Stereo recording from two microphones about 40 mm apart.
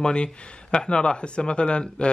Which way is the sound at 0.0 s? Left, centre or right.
Left.